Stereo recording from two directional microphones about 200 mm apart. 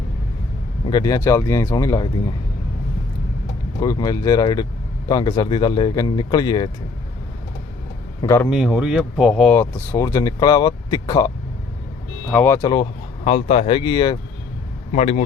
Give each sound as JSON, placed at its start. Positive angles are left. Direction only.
{"t": 0.9, "sound": "speech", "side_deg": 20}
{"t": 3.8, "sound": "speech", "side_deg": 20}
{"t": 8.2, "sound": "speech", "side_deg": 15}
{"t": 8.4, "sound": "speech", "side_deg": -5}
{"t": 9.6, "sound": "speech", "side_deg": 10}
{"t": 12.3, "sound": "speech", "side_deg": 10}
{"t": 12.6, "sound": "speech", "side_deg": 25}
{"t": 14.9, "sound": "speech", "side_deg": 35}